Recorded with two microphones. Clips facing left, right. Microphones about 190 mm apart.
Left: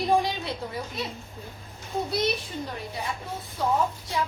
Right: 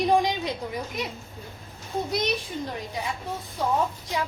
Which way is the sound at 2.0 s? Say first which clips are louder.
Left 2 dB; 15° right (ahead or behind).